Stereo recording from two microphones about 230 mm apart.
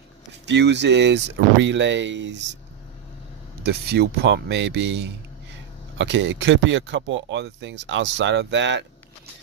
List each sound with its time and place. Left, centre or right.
0.5 s speech: right
3.6 s speech: right